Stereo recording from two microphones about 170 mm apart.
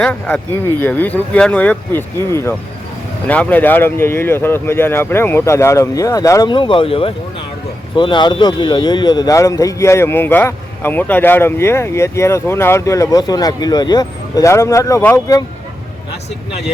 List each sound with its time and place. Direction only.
0.0 s speech: 5° left (ahead or behind)